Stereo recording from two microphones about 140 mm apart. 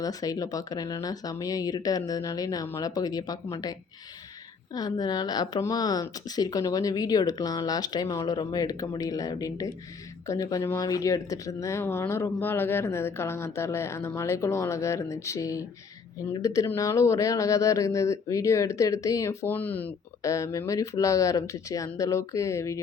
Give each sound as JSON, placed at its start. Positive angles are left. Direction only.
{"t": 0.0, "sound": "speech", "side_deg": 25}
{"t": 20.2, "sound": "speech", "side_deg": 25}